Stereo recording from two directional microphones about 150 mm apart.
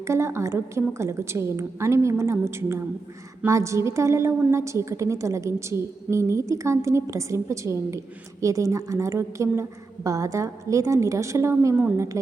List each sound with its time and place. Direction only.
0.0 s a woman's voice: 20° right (ahead or behind)